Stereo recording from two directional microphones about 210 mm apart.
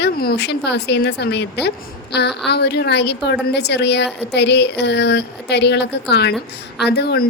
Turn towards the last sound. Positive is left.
turn(degrees=50)  # may be behind; listen again after turning